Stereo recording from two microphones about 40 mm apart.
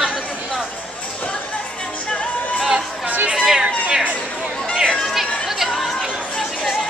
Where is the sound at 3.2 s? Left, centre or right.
Centre.